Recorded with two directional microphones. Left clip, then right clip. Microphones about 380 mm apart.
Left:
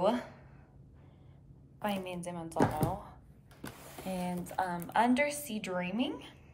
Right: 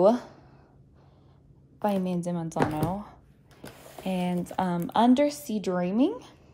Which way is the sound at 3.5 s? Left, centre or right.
Centre.